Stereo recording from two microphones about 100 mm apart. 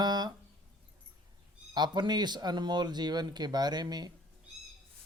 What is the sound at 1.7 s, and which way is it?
Speech, 45° right (ahead or behind).